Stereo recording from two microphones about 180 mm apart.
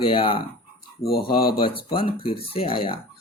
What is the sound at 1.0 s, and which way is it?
Speech, 60° left (ahead or behind).